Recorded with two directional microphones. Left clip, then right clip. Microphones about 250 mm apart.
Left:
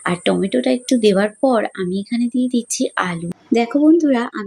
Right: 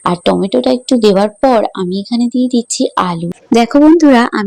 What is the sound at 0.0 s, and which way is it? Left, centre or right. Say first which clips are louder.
Speech: right 6 dB; centre.